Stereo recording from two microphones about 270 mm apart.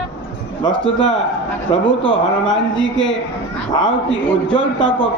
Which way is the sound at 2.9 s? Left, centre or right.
Left.